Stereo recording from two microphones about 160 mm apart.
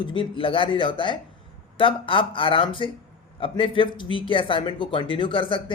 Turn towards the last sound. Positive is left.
turn(degrees=35)  # may be behind; listen again after turning